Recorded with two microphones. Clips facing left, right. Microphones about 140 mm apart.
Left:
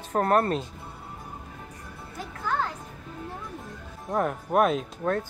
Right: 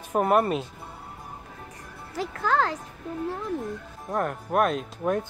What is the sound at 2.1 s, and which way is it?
Speech, 90° right.